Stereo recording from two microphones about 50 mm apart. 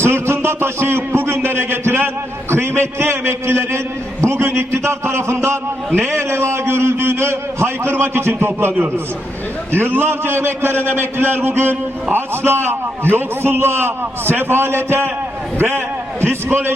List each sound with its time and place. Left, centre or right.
0.0 s a sound: right
2.5 s a man's voice: right
9.7 s a man's voice: right